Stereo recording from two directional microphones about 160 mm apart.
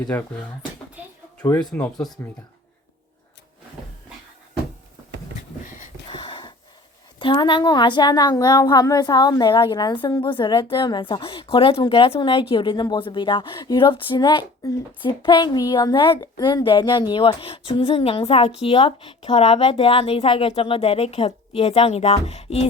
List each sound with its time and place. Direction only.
0.1 s speech: 10° left (ahead or behind)
1.4 s speech: 10° left (ahead or behind)
6.1 s a sound: 30° left (ahead or behind)
7.2 s a woman's voice: 30° left (ahead or behind)